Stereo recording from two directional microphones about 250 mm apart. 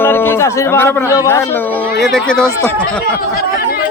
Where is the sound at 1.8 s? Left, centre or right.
Centre.